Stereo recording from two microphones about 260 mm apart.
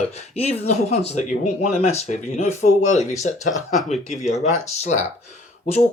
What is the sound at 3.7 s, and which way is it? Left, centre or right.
Speech, centre.